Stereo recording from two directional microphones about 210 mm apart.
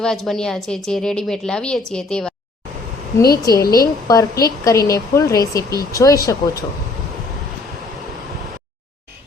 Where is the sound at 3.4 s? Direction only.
20° left (ahead or behind).